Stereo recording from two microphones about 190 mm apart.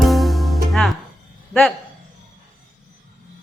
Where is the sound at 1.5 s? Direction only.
Centre (ahead or behind).